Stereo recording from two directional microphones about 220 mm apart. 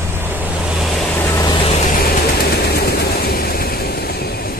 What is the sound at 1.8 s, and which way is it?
Vehicle, 40° left (ahead or behind).